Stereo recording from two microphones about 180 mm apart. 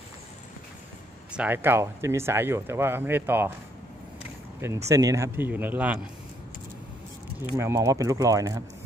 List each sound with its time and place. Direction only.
1.3 s speech: 10° right (ahead or behind)
4.8 s speech: 15° right (ahead or behind)
7.5 s speech: 15° right (ahead or behind)